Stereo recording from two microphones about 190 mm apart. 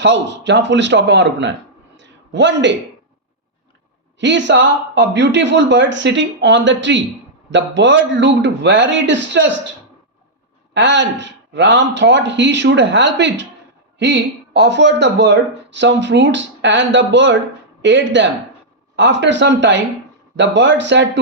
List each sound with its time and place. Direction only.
0.0 s speech: 70° right (ahead or behind)
2.0 s a sound: 70° right (ahead or behind)
4.2 s speech: 70° right (ahead or behind)
10.8 s speech: 70° right (ahead or behind)